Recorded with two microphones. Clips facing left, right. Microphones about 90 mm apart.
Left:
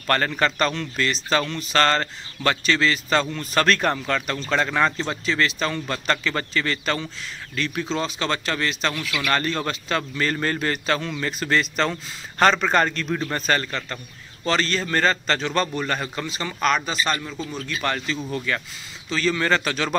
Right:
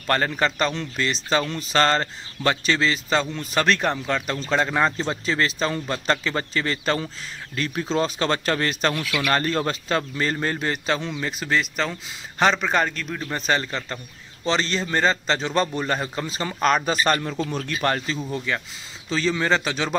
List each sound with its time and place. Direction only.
0.0 s a man's voice: 20° right (ahead or behind)
4.1 s a man's voice: 25° right (ahead or behind)
4.9 s a man's voice: 30° right (ahead or behind)
8.9 s a man's voice: 15° right (ahead or behind)
9.3 s a man's voice: 30° right (ahead or behind); by 13.4 s centre (ahead or behind)
13.4 s a man's voice: 20° right (ahead or behind); by 16.9 s 35° right (ahead or behind)
17.0 s speech: 45° right (ahead or behind)
17.6 s speech: 35° right (ahead or behind)
18.5 s a man's voice: 20° right (ahead or behind)